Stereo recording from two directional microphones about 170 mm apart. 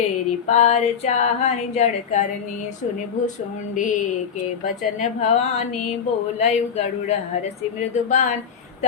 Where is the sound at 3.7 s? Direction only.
50° left (ahead or behind).